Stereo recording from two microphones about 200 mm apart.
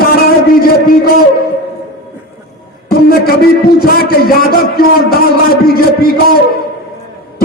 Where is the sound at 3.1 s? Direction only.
50° left (ahead or behind).